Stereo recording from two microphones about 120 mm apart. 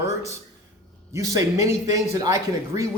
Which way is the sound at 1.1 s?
25° right (ahead or behind).